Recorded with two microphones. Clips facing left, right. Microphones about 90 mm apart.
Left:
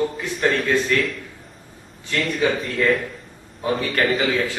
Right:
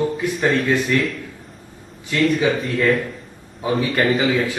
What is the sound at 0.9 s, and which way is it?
Speech, 15° right (ahead or behind).